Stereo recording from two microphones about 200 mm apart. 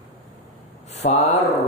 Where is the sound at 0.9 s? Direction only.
30° left (ahead or behind).